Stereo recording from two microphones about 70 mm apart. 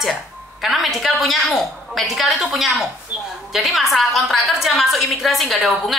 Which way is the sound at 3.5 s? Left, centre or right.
Centre.